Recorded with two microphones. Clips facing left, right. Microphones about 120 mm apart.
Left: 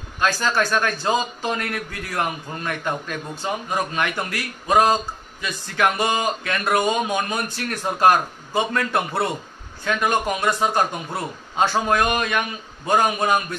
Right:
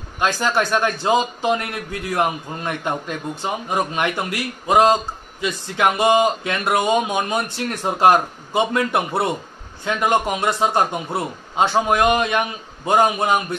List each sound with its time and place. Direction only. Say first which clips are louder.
0.2 s a man's voice: right 2 dB; 20° right (ahead or behind)